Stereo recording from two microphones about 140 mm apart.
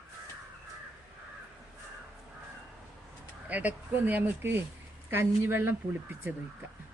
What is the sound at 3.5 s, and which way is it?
Speech, 10° right (ahead or behind).